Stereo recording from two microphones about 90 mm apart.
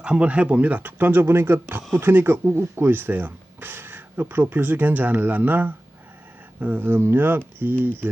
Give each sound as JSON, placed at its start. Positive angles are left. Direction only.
{"t": 0.0, "sound": "speech", "side_deg": -10}